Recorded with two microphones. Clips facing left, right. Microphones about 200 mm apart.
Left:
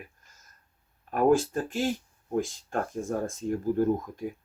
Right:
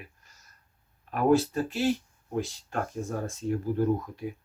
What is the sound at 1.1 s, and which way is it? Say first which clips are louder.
Speech: even; 50° left (ahead or behind).